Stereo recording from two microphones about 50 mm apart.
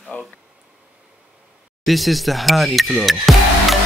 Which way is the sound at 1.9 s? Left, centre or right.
Centre.